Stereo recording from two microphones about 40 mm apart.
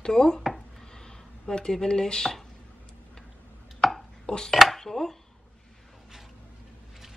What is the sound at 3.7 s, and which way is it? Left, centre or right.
Chopping, centre.